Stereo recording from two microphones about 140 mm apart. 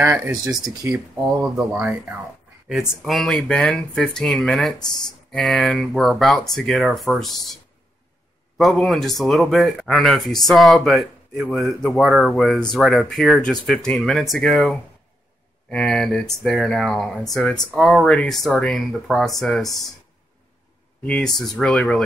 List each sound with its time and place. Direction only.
0.0 s speech: 20° right (ahead or behind)
0.9 s speech: centre (ahead or behind)
8.5 s speech: centre (ahead or behind)
21.0 s speech: 5° left (ahead or behind)